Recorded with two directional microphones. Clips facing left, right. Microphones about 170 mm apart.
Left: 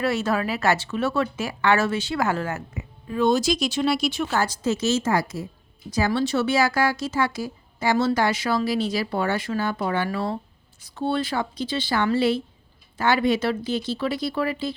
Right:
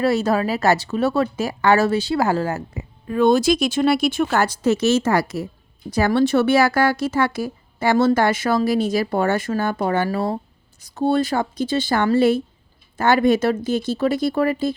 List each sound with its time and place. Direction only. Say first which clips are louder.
0.0 s speech: right 5 dB; 35° right (ahead or behind)
3.1 s speech: right 5 dB; 55° right (ahead or behind)
5.9 s speech: right 6 dB; 55° right (ahead or behind)